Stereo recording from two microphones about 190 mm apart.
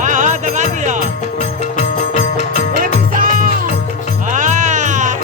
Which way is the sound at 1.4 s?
40° left (ahead or behind).